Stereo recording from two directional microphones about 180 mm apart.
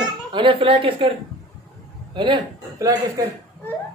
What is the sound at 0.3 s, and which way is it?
Speech, 30° right (ahead or behind).